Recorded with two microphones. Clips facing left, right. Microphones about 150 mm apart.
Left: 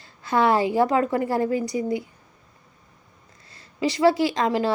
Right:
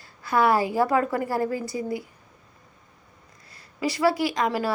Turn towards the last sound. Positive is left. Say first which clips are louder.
# left 3 dB
turn(degrees=25)  # may be behind; listen again after turning